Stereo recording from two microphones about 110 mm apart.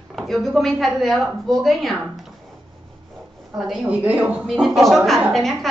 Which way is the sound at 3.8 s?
15° right (ahead or behind).